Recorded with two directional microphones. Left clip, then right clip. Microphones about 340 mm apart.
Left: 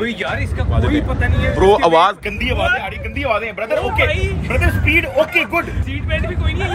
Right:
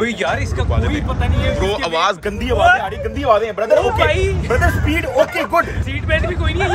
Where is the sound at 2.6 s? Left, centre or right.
Right.